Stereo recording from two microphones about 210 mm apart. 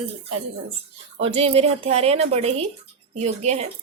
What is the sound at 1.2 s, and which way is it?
Speech, 30° right (ahead or behind).